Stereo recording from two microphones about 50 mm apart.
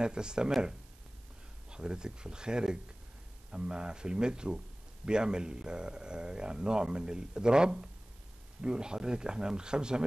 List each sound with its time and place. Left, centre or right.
0.0 s a man's voice: centre
1.7 s a man's voice: centre